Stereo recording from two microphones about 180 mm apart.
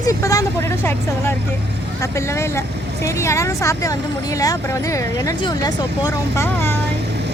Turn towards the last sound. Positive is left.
turn(degrees=15)  # may be behind; listen again after turning